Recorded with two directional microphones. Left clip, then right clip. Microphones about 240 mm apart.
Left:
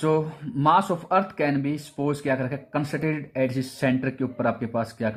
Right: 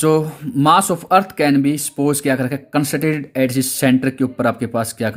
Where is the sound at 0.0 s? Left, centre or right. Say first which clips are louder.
Right 8 dB; right.